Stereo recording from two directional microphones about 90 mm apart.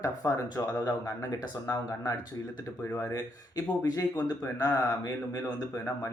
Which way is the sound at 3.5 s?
45° left (ahead or behind).